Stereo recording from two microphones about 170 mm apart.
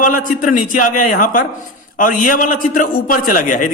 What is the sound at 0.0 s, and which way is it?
A man's voice, 50° left (ahead or behind).